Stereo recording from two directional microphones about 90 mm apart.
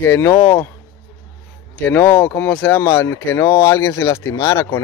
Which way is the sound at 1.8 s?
20° left (ahead or behind).